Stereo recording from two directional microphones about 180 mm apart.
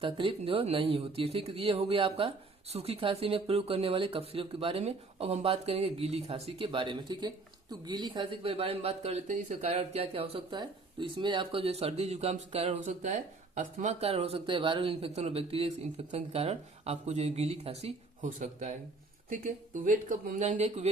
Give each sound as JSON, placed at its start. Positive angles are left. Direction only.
{"t": 0.0, "sound": "speech", "side_deg": -30}